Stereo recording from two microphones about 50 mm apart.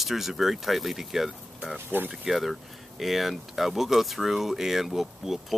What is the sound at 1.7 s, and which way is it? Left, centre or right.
Speech, right.